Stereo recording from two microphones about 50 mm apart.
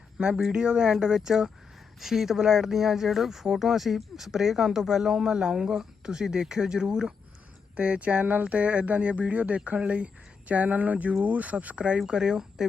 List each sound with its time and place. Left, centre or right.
0.2 s speech: centre